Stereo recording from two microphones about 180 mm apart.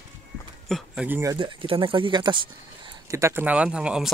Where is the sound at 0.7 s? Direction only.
Centre (ahead or behind).